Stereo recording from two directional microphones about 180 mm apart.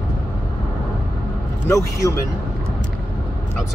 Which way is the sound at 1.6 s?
15° left (ahead or behind).